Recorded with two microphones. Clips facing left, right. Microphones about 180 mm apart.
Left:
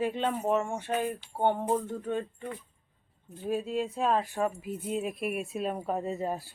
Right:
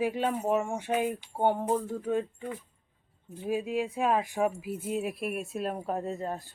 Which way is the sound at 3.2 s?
5° right (ahead or behind).